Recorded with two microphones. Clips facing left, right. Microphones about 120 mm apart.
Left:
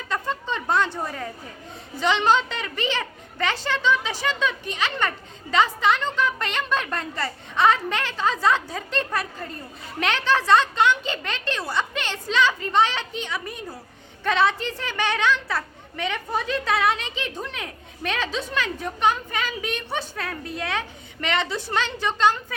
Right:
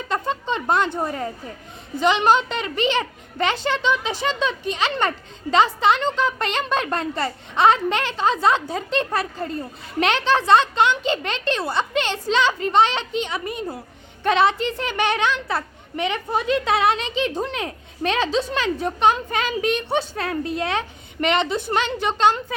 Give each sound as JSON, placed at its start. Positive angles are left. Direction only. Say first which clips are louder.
{"t": 0.1, "sound": "a sound", "louder": "right 3 dB", "side_deg": -20}
{"t": 0.9, "sound": "speech", "louder": "right 5 dB", "side_deg": -30}
{"t": 2.0, "sound": "a woman's voice", "louder": "right 3 dB", "side_deg": -15}